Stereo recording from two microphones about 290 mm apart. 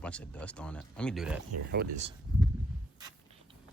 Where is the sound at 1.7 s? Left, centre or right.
Right.